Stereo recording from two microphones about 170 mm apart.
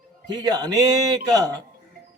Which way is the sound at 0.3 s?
25° right (ahead or behind).